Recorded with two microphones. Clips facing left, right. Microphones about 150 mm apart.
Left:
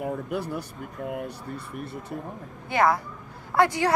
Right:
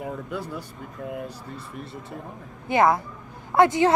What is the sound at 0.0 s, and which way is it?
Speech, 75° left (ahead or behind).